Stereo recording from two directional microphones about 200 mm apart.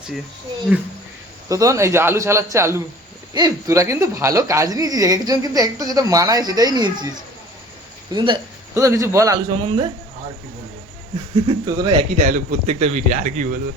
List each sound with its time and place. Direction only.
0.7 s speech: 5° right (ahead or behind)
1.5 s speech: 15° right (ahead or behind)
8.1 s speech: 25° right (ahead or behind)
8.7 s speech: 15° right (ahead or behind)
11.4 s speech: 20° right (ahead or behind)
12.1 s speech: 40° right (ahead or behind)